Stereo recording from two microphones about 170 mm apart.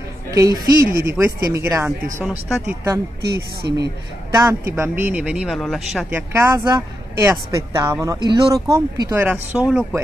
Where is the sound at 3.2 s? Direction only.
70° right (ahead or behind).